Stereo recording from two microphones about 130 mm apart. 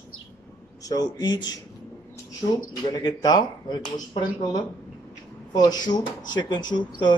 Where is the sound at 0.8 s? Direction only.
30° left (ahead or behind).